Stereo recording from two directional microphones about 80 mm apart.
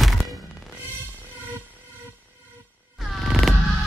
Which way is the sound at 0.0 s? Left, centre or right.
Centre.